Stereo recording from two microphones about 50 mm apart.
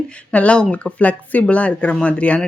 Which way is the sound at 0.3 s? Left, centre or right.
Left.